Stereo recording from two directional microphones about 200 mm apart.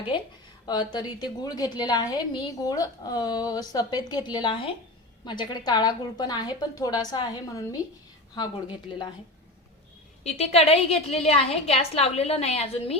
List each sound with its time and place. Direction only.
0.6 s a woman's voice: 20° left (ahead or behind)
10.2 s a woman's voice: 30° left (ahead or behind)